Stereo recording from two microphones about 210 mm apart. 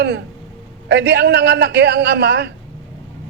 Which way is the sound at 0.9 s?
50° right (ahead or behind).